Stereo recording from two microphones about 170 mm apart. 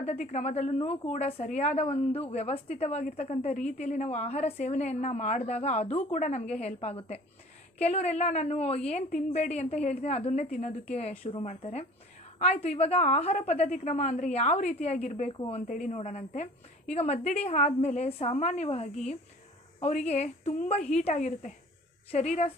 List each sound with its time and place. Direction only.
0.0 s a woman's voice: 45° left (ahead or behind)
11.2 s a woman's voice: 30° left (ahead or behind)
11.4 s a woman's voice: 40° left (ahead or behind)
15.6 s a woman's voice: 50° left (ahead or behind)